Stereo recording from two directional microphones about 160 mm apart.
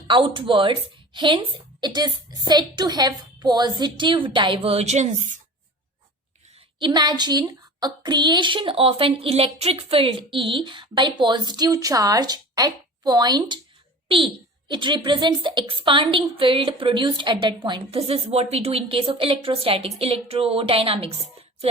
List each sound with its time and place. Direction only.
0.1 s a woman's voice: 30° right (ahead or behind); by 5.4 s 50° right (ahead or behind)
6.7 s a woman's voice: 30° right (ahead or behind)
14.7 s a woman's voice: 30° right (ahead or behind)